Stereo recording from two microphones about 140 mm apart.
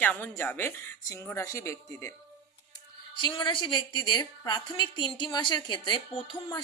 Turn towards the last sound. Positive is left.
turn(degrees=35)  # may be behind; listen again after turning